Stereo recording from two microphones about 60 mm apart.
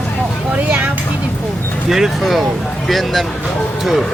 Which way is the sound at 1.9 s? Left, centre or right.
Centre.